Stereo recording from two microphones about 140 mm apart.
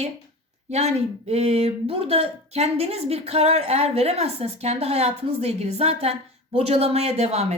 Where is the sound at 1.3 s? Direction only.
45° right (ahead or behind).